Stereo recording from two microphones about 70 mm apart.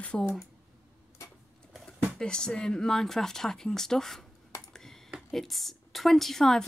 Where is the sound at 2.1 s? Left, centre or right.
Centre.